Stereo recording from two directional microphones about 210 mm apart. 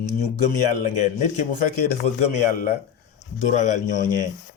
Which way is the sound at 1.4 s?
40° left (ahead or behind).